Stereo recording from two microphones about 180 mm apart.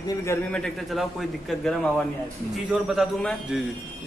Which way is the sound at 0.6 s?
Centre (ahead or behind).